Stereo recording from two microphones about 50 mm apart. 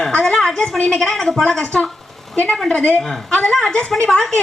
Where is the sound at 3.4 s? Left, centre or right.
Centre.